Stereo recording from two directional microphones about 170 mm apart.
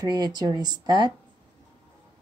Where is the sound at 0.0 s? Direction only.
25° right (ahead or behind).